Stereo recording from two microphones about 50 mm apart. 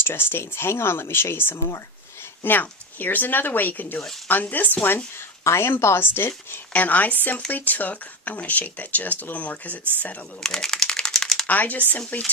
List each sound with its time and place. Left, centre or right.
0.0 s speech: left
2.4 s speech: left
5.4 s speech: left
6.7 s speech: left
10.4 s typing: centre
11.4 s speech: left